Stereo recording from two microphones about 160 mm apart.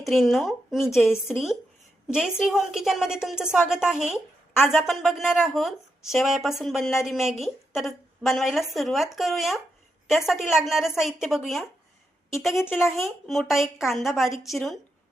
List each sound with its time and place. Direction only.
0.0 s speech: centre (ahead or behind)
2.1 s a woman's voice: 5° right (ahead or behind)